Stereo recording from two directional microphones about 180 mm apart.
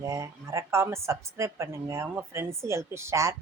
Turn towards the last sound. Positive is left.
turn(degrees=-15)  # may be behind; listen again after turning